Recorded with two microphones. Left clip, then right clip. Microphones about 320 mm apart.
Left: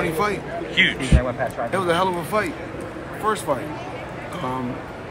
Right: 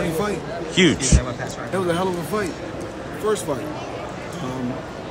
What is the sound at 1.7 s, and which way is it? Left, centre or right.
Speech, centre.